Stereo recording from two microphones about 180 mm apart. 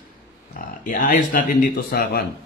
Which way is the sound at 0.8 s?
50° left (ahead or behind).